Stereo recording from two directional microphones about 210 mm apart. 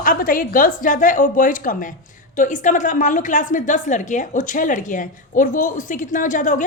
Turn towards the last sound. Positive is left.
turn(degrees=40)  # may be behind; listen again after turning